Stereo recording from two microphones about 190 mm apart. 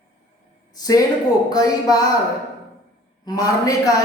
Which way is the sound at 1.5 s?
20° left (ahead or behind).